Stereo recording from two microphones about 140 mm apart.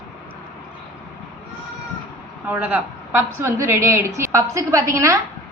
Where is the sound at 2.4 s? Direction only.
10° right (ahead or behind).